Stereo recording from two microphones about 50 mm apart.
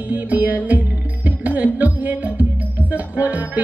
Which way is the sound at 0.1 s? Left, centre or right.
Right.